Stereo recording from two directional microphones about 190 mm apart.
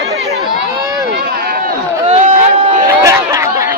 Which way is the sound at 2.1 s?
30° right (ahead or behind).